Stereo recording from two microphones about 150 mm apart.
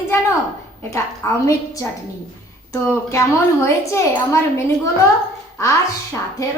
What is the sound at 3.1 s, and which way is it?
A woman's voice, 20° left (ahead or behind).